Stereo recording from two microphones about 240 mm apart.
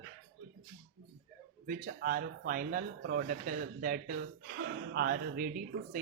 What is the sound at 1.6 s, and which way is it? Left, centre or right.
Speech, right.